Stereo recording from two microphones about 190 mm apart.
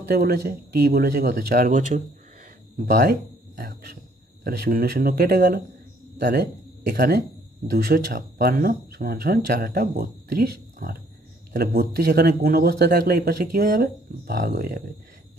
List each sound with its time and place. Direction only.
0.1 s speech: 55° right (ahead or behind)
6.1 s speech: 60° right (ahead or behind)
11.5 s speech: 55° right (ahead or behind)